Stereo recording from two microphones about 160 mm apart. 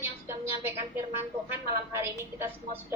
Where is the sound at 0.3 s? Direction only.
15° right (ahead or behind).